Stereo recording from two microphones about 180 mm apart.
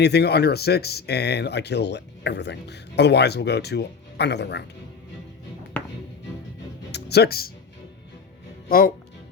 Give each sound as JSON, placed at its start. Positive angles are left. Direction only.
{"t": 0.0, "sound": "speech", "side_deg": 65}
{"t": 6.9, "sound": "speech", "side_deg": 65}